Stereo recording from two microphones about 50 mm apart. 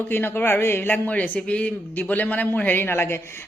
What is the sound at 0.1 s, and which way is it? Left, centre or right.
Speech, left.